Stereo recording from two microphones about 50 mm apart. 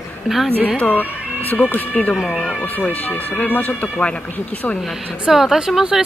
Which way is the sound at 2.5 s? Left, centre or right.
Left.